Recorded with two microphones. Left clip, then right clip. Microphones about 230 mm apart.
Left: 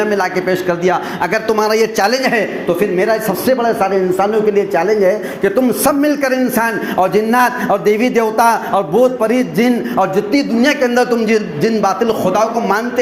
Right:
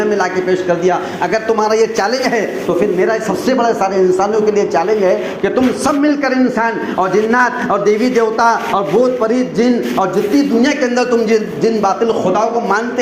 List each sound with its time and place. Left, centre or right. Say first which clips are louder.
0.0 s a man's voice: even; left